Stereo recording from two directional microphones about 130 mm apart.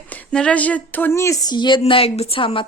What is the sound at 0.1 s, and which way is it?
Speech, 10° left (ahead or behind).